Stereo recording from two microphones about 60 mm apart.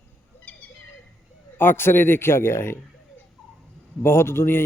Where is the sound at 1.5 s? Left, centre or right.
Left.